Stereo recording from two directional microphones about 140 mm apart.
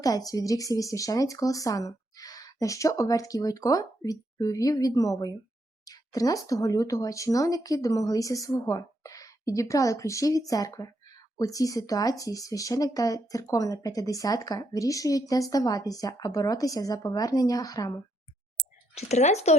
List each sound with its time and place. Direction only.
0.0 s speech: 25° left (ahead or behind)
18.9 s speech: 55° left (ahead or behind)